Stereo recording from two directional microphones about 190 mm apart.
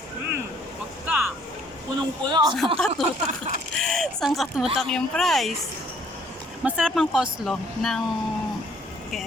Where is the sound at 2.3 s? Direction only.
20° right (ahead or behind).